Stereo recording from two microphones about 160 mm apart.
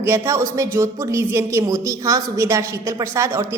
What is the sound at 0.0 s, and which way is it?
A woman's voice, 15° right (ahead or behind).